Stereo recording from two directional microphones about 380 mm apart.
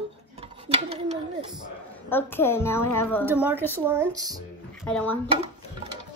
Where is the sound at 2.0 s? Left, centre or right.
Centre.